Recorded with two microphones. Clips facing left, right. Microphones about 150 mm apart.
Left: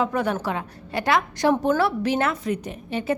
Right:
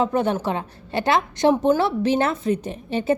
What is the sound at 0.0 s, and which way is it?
A woman's voice, 25° right (ahead or behind).